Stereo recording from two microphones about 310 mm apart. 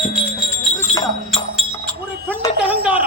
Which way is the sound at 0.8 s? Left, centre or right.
Centre.